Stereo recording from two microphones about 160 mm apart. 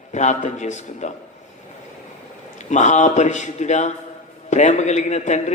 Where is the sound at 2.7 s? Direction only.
50° left (ahead or behind).